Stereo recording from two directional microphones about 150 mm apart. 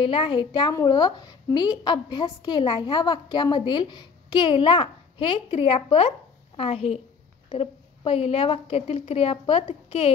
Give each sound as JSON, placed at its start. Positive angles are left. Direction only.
{"t": 0.0, "sound": "a woman's voice", "side_deg": 35}